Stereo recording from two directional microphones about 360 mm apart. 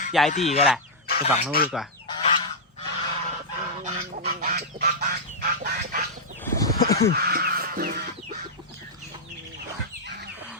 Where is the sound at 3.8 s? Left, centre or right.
Centre.